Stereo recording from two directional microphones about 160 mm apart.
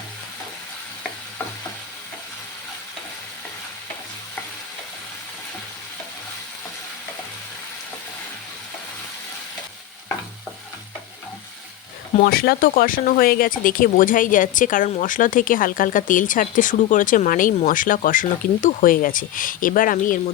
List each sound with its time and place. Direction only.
12.2 s speech: 70° left (ahead or behind)